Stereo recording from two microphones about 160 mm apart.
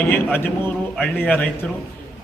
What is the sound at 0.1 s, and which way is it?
A man's voice, 15° left (ahead or behind).